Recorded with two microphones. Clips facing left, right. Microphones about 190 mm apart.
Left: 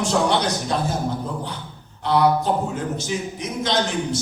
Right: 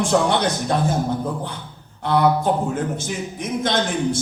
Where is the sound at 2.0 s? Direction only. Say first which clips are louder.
Right 1 dB; 55° right (ahead or behind).